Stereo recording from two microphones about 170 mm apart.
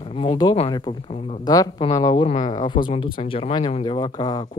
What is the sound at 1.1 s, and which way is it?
Speech, 40° left (ahead or behind).